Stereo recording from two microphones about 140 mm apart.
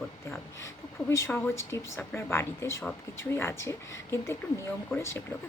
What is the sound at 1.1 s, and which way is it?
Speech, 20° left (ahead or behind).